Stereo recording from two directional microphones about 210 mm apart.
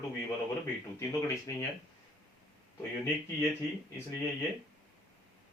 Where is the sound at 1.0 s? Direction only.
15° left (ahead or behind).